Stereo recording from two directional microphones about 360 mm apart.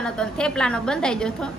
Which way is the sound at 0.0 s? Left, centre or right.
Centre.